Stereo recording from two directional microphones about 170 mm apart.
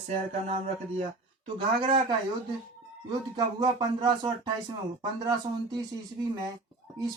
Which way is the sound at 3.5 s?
25° right (ahead or behind).